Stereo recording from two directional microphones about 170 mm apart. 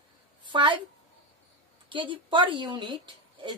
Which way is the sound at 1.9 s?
30° right (ahead or behind).